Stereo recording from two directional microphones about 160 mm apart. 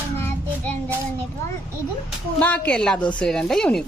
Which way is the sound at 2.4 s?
10° left (ahead or behind).